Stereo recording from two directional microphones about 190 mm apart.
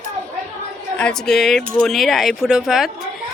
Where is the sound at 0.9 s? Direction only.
5° left (ahead or behind).